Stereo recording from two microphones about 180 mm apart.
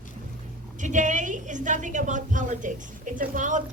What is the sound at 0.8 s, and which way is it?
A woman's voice, 45° right (ahead or behind).